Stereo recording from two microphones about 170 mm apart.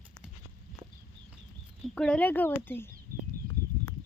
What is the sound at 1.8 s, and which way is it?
Speech, 5° left (ahead or behind).